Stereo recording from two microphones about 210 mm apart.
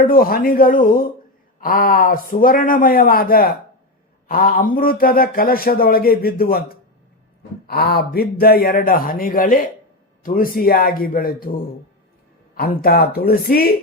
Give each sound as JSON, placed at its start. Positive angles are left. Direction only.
{"t": 0.0, "sound": "a man's voice", "side_deg": 45}